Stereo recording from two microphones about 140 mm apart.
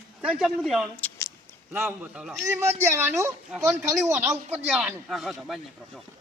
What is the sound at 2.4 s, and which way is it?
Speech, 20° right (ahead or behind).